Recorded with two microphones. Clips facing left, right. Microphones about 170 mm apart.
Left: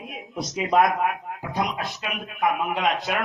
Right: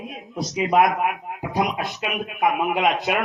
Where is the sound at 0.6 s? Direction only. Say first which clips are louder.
Right 2 dB; 20° right (ahead or behind).